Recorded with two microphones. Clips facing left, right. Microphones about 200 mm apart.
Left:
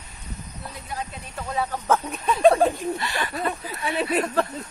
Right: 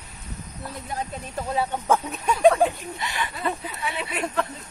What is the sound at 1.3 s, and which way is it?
A woman's voice, 25° right (ahead or behind).